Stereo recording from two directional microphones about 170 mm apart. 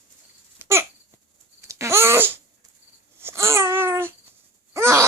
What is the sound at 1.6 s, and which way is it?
Wail, 15° right (ahead or behind).